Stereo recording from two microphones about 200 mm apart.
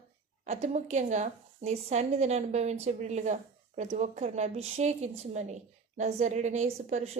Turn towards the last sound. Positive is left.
turn(degrees=-35)  # may be behind; listen again after turning